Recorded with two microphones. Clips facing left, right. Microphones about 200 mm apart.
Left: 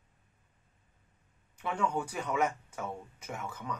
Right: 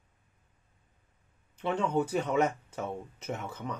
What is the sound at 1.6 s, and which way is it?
Speech, 25° right (ahead or behind).